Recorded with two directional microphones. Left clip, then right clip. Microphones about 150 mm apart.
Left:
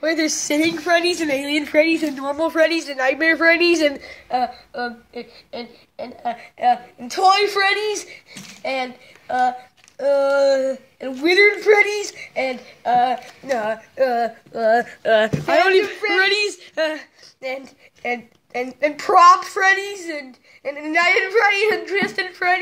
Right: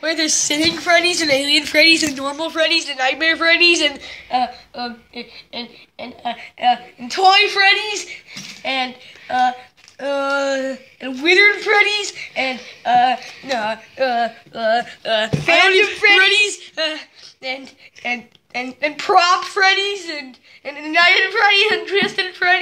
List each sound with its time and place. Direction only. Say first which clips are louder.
0.0 s a woman's voice: right 2 dB; 60° left (ahead or behind)
1.7 s a woman's voice: right 3 dB; 35° left (ahead or behind)
2.3 s a woman's voice: left 1 dB; 75° left (ahead or behind); by 8.9 s 55° left (ahead or behind)
9.9 s a woman's voice: left 3 dB; 45° left (ahead or behind)
13.6 s speech: even; 70° left (ahead or behind)
18.9 s a woman's voice: left 3 dB; 65° left (ahead or behind)